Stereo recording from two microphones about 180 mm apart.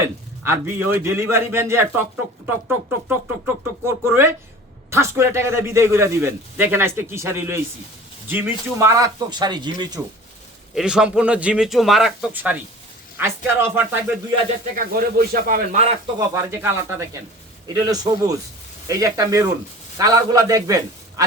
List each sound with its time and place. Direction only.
0.0 s a man's voice: 15° right (ahead or behind)
10.8 s a man's voice: 5° right (ahead or behind)
14.8 s a man's voice: 55° right (ahead or behind)
16.1 s a man's voice: 15° right (ahead or behind)